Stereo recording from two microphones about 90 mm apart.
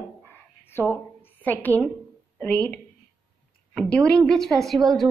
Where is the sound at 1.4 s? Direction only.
20° left (ahead or behind).